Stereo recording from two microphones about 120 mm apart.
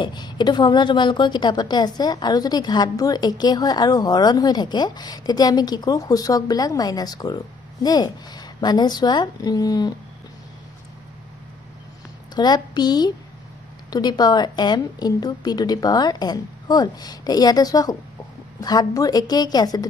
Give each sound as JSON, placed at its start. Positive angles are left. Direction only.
{"t": 0.0, "sound": "a woman's voice", "side_deg": 35}
{"t": 12.4, "sound": "a woman's voice", "side_deg": 35}